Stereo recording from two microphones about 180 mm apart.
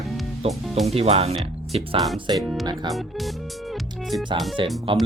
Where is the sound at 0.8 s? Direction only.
35° right (ahead or behind).